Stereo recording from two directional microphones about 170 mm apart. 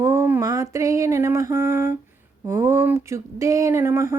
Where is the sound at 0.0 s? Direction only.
15° right (ahead or behind).